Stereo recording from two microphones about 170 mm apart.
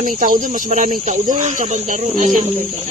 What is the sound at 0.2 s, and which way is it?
Speech, 50° right (ahead or behind).